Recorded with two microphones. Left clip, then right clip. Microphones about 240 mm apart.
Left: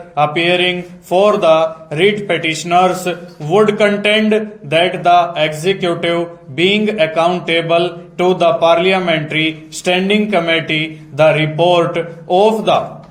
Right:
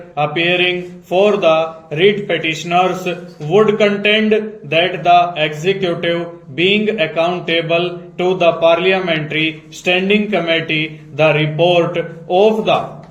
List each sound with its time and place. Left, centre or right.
0.2 s speech: left